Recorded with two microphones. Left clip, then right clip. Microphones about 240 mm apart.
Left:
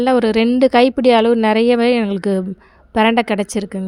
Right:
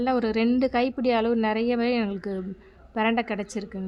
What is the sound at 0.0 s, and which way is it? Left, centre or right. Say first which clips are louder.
A woman's voice: left 10 dB; left.